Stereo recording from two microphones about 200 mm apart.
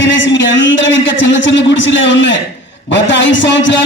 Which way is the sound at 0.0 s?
65° left (ahead or behind).